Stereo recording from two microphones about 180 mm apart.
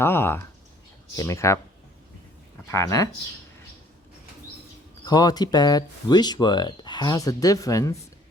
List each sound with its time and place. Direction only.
0.0 s speech: 15° left (ahead or behind)
2.6 s speech: 15° left (ahead or behind)
5.0 s speech: 20° left (ahead or behind)